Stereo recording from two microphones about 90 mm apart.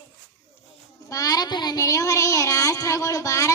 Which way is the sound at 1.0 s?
40° left (ahead or behind).